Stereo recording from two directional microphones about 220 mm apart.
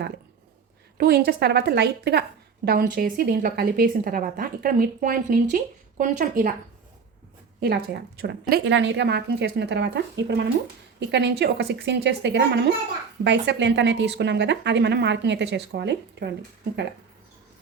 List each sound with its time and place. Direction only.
0.9 s a woman's voice: 45° right (ahead or behind)
7.6 s a woman's voice: 45° right (ahead or behind)